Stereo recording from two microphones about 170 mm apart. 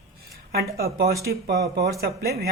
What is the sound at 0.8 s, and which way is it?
Speech, 65° right (ahead or behind).